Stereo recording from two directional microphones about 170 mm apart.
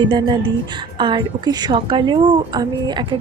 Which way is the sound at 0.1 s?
25° right (ahead or behind).